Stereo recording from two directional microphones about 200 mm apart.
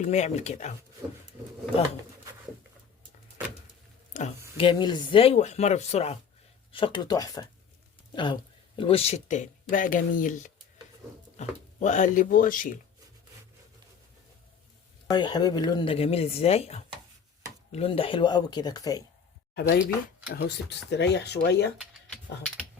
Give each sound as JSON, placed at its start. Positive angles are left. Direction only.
{"t": 0.0, "sound": "speech", "side_deg": 35}
{"t": 4.1, "sound": "speech", "side_deg": 35}
{"t": 4.5, "sound": "a woman's voice", "side_deg": 25}
{"t": 15.1, "sound": "a woman's voice", "side_deg": 20}
{"t": 19.5, "sound": "speech", "side_deg": 55}
{"t": 21.8, "sound": "speech", "side_deg": 5}